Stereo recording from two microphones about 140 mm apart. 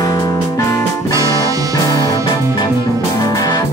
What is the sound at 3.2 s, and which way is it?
Music, 25° left (ahead or behind).